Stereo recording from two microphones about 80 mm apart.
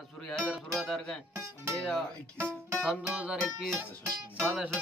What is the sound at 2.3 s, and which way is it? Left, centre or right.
Speech, right.